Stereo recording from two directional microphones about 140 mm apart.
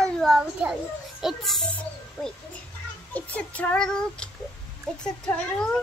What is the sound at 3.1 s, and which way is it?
A child's voice, 10° left (ahead or behind).